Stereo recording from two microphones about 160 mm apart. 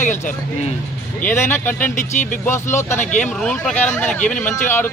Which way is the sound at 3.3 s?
5° left (ahead or behind).